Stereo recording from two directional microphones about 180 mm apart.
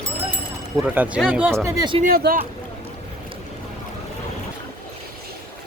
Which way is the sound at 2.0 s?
55° right (ahead or behind).